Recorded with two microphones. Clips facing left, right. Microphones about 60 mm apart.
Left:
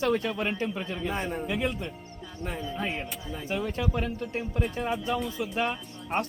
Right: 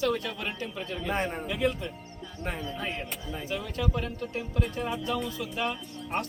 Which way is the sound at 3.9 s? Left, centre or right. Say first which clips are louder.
Left 2 dB; left.